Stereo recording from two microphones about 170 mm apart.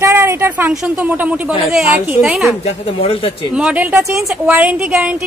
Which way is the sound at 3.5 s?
10° right (ahead or behind).